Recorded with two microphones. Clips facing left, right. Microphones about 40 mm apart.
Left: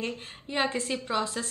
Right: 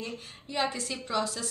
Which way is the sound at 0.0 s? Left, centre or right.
Left.